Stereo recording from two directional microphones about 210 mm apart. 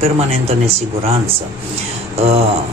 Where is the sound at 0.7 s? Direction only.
30° right (ahead or behind).